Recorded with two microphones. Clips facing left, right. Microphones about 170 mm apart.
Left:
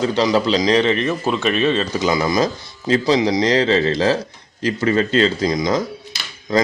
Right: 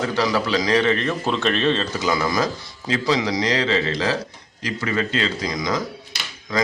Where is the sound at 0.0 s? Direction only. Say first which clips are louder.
Left 5 dB; 20° left (ahead or behind).